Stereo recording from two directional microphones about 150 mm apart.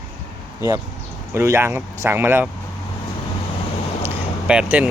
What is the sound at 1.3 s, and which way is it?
Speech, 15° right (ahead or behind).